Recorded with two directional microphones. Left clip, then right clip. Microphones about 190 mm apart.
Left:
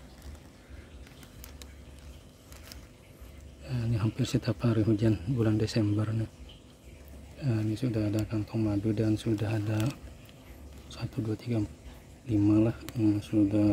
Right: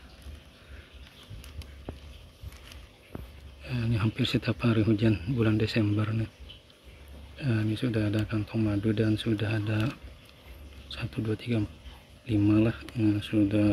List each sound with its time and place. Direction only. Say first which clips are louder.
3.6 s a man's voice: right 3 dB; 10° left (ahead or behind)
7.3 s a man's voice: right 2 dB; 10° left (ahead or behind)
11.0 s a man's voice: right 2 dB; 10° left (ahead or behind)